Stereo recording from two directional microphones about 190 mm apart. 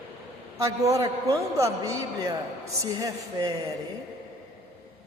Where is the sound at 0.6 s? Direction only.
15° right (ahead or behind).